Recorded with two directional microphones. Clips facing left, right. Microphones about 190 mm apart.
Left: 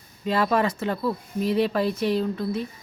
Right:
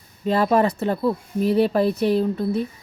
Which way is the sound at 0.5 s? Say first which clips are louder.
Right 4 dB; 40° right (ahead or behind).